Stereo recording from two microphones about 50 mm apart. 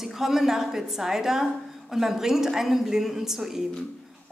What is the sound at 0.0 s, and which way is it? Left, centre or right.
A woman's voice, centre.